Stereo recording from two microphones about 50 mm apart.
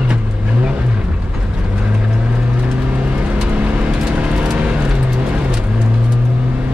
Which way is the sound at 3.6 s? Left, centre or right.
Right.